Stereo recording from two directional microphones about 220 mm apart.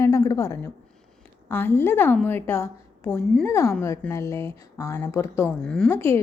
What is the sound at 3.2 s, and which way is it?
Speech, centre (ahead or behind).